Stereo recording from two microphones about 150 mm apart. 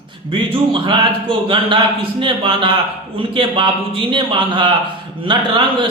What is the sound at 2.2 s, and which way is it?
A man's voice, 35° right (ahead or behind).